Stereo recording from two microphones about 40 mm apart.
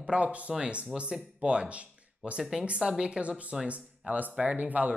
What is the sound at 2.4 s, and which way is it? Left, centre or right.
Speech, centre.